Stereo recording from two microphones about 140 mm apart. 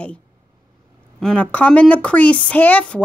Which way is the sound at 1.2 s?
10° left (ahead or behind).